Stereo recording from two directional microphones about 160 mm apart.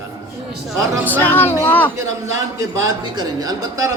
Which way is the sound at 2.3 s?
20° right (ahead or behind).